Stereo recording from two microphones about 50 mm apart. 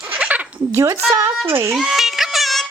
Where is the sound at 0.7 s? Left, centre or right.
Right.